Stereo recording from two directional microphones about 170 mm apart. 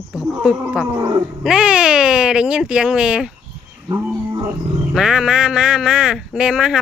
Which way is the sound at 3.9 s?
15° right (ahead or behind).